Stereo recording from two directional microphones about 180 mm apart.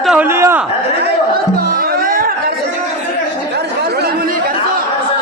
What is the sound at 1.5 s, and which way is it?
Music, 50° right (ahead or behind).